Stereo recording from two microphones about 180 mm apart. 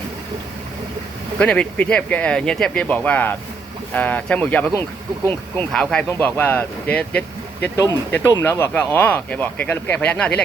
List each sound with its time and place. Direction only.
1.4 s speech: 5° left (ahead or behind)
4.7 s speech: 20° right (ahead or behind)
5.5 s speech: 5° left (ahead or behind)